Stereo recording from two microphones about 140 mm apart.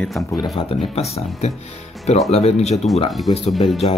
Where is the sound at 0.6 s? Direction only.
45° left (ahead or behind).